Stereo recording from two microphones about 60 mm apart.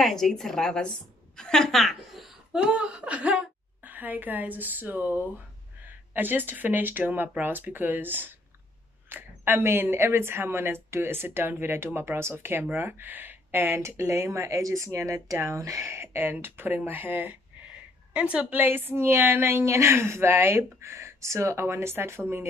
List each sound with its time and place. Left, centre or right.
0.0 s a woman's voice: centre
2.5 s laughter: centre
3.8 s a woman's voice: right
18.1 s a woman's voice: centre
18.5 s speech: right